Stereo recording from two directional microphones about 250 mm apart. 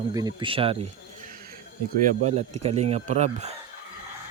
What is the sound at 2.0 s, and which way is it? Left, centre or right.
Speech, right.